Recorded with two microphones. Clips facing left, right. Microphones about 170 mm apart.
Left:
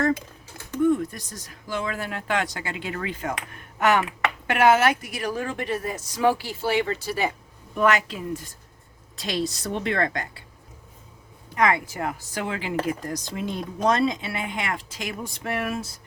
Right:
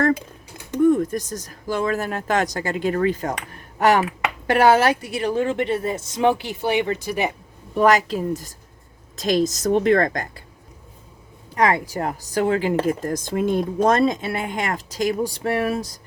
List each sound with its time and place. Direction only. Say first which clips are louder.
0.8 s a woman's voice: right 5 dB; 45° right (ahead or behind); by 7.3 s 15° right (ahead or behind)
7.8 s a woman's voice: right 5 dB; 40° right (ahead or behind)
11.5 s a woman's voice: right 3 dB; 35° right (ahead or behind)